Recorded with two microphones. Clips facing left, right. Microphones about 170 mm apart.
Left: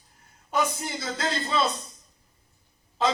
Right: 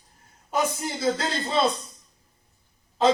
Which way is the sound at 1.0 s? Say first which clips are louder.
Right 5 dB; 35° right (ahead or behind).